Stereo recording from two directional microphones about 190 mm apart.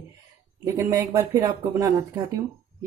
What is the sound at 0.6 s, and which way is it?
Speech, 15° right (ahead or behind).